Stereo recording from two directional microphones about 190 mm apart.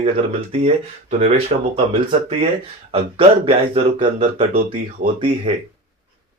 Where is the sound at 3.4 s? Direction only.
30° right (ahead or behind).